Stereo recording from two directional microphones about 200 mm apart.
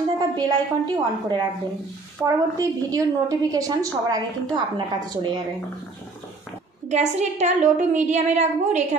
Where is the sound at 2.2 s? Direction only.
5° left (ahead or behind).